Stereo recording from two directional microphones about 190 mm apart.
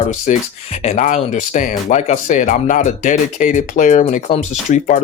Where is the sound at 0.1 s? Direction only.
35° left (ahead or behind).